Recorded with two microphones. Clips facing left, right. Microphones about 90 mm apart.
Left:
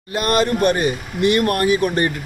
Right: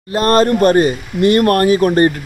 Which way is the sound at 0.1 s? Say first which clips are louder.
Right 6 dB; 35° right (ahead or behind).